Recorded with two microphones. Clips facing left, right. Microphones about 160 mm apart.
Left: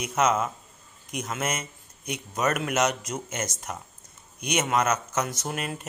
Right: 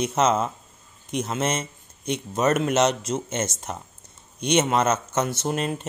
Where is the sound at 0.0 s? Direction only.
30° right (ahead or behind).